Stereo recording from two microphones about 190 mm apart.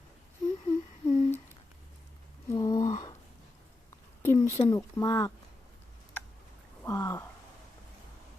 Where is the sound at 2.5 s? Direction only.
20° left (ahead or behind).